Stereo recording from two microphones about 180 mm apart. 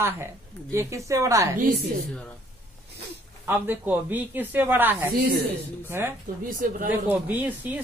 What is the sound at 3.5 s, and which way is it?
Speech, 10° right (ahead or behind).